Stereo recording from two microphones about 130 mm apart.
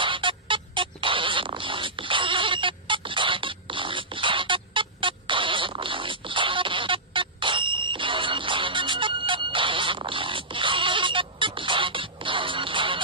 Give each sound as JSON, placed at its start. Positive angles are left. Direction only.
{"t": 0.0, "sound": "music", "side_deg": -40}